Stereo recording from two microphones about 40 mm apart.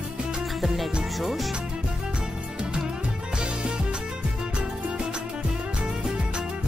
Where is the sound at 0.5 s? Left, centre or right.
Centre.